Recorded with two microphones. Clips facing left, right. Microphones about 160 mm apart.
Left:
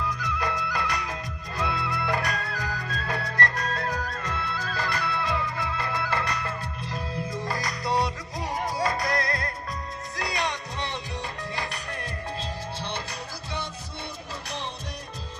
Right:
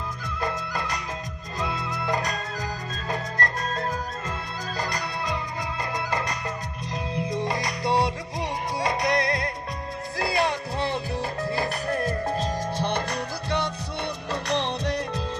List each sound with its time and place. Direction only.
0.2 s music: 25° right (ahead or behind)
4.4 s music: 45° right (ahead or behind)
4.7 s music: 20° right (ahead or behind)
10.2 s music: 35° right (ahead or behind); by 13.7 s 60° right (ahead or behind)
14.4 s music: 75° right (ahead or behind)